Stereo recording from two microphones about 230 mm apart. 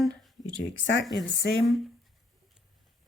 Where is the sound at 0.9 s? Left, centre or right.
Left.